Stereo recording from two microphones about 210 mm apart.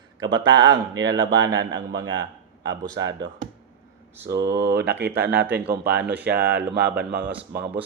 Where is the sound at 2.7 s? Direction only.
60° right (ahead or behind).